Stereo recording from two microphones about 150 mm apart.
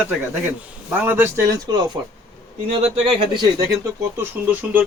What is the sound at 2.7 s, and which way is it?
Speech, 40° right (ahead or behind).